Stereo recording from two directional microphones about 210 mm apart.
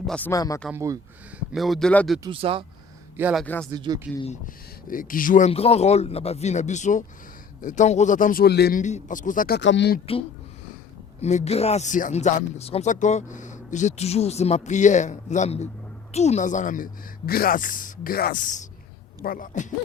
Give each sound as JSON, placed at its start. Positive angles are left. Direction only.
{"t": 0.1, "sound": "speech", "side_deg": 10}
{"t": 0.7, "sound": "speech", "side_deg": -15}
{"t": 1.5, "sound": "speech", "side_deg": 0}
{"t": 2.2, "sound": "speech", "side_deg": -25}
{"t": 3.2, "sound": "speech", "side_deg": -5}
{"t": 3.4, "sound": "speech", "side_deg": 5}
{"t": 3.7, "sound": "speech", "side_deg": -20}
{"t": 4.2, "sound": "speech", "side_deg": 35}
{"t": 8.8, "sound": "speech", "side_deg": 35}
{"t": 9.6, "sound": "speech", "side_deg": 60}
{"t": 11.2, "sound": "speech", "side_deg": 30}